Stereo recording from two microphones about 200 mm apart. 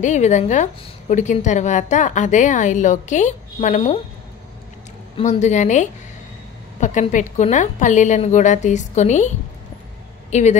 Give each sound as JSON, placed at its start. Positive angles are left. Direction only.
{"t": 0.0, "sound": "a woman's voice", "side_deg": 35}
{"t": 5.1, "sound": "a woman's voice", "side_deg": 30}
{"t": 10.3, "sound": "a woman's voice", "side_deg": 35}